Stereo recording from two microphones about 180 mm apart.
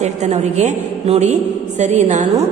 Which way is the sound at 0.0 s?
40° right (ahead or behind).